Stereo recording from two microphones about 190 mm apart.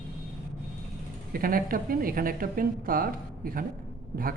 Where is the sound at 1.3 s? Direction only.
50° right (ahead or behind).